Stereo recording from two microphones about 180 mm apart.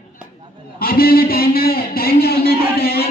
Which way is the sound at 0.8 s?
55° left (ahead or behind).